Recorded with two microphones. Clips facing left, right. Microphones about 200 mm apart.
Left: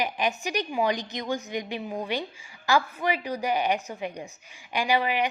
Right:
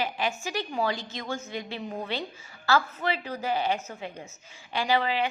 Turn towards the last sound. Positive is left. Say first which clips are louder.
# left 1 dB
turn(degrees=15)  # may be behind; listen again after turning